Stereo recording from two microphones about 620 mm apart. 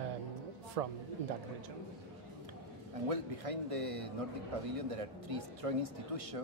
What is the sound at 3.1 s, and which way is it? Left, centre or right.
Speech, right.